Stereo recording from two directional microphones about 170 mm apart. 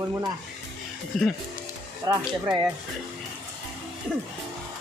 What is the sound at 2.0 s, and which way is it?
Speech, 20° right (ahead or behind).